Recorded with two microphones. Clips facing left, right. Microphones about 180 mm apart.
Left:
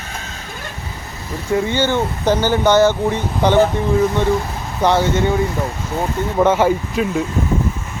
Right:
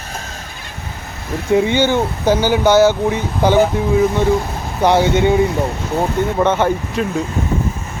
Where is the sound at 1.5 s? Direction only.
15° right (ahead or behind).